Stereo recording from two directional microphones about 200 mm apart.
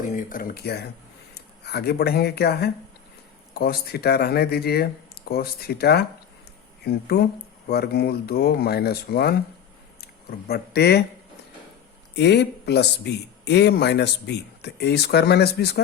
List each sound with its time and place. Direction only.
0.0 s speech: 40° left (ahead or behind)
10.5 s speech: 55° left (ahead or behind)
12.1 s speech: 60° left (ahead or behind)